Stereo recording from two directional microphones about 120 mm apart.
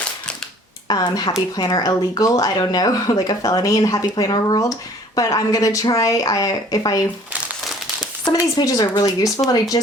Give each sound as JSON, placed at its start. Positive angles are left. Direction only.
{"t": 0.9, "sound": "speech", "side_deg": 35}
{"t": 8.2, "sound": "speech", "side_deg": 35}